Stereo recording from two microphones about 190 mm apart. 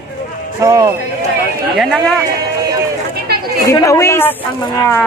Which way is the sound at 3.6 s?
15° left (ahead or behind).